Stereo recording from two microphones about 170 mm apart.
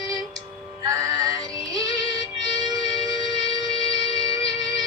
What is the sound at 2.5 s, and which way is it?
Music, 25° right (ahead or behind).